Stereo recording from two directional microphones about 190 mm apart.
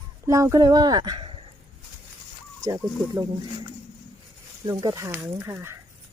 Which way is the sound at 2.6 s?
20° right (ahead or behind).